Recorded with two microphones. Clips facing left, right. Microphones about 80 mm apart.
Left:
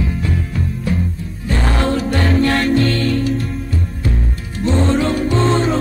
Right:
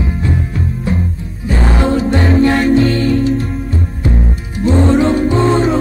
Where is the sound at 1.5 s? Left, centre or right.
Centre.